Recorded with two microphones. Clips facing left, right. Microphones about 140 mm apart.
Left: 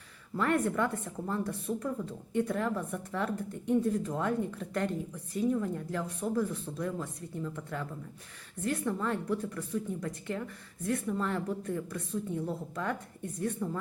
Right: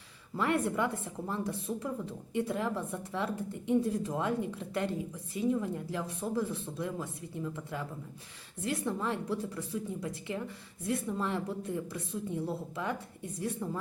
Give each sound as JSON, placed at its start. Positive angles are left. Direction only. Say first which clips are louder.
{"t": 0.3, "sound": "a woman's voice", "louder": "left 1 dB", "side_deg": -15}